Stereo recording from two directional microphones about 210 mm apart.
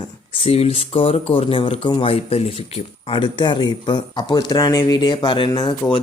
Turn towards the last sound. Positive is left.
turn(degrees=20)  # may be behind; listen again after turning